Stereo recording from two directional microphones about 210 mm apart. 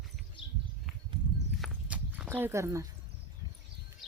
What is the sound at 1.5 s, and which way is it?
Walk, 5° right (ahead or behind).